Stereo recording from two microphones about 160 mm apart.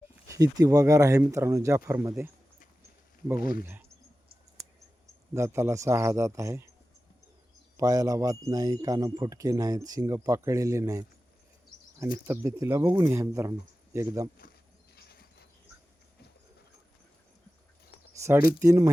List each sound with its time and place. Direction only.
0.3 s a man's voice: 20° right (ahead or behind)
5.3 s a man's voice: 15° right (ahead or behind)
7.8 s a man's voice: 20° right (ahead or behind)
14.9 s a sound: 85° left
18.2 s a sound: 20° right (ahead or behind)
18.6 s a man's voice: 20° right (ahead or behind)